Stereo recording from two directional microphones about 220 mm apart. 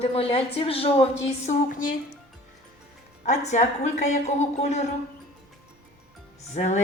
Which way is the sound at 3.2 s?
30° left (ahead or behind).